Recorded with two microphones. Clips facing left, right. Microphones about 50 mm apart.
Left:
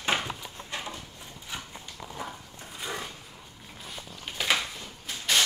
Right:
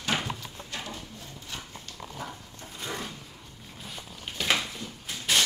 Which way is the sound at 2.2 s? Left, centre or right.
Centre.